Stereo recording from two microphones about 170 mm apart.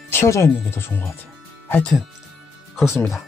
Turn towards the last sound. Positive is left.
turn(degrees=0)  # may be behind; listen again after turning